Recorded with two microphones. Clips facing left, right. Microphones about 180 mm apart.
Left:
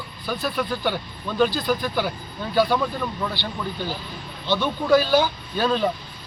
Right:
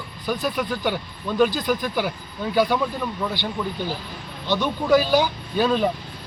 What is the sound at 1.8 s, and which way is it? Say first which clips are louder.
Speech: even; 10° right (ahead or behind).